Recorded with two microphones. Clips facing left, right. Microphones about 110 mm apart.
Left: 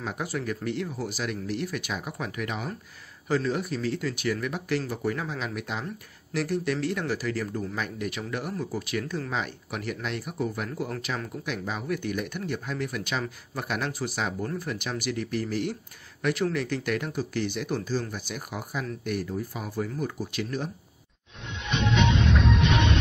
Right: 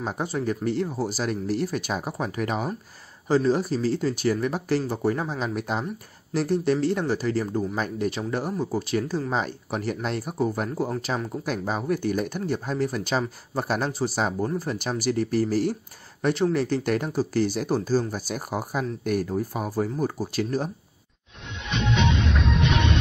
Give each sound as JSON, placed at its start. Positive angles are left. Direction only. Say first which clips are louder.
{"t": 0.0, "sound": "speech", "louder": "right 4 dB", "side_deg": -30}
{"t": 22.3, "sound": "music", "louder": "left 1 dB", "side_deg": 0}